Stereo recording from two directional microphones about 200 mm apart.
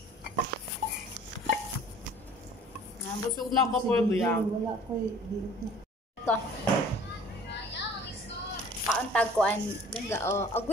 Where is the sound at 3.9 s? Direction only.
5° left (ahead or behind).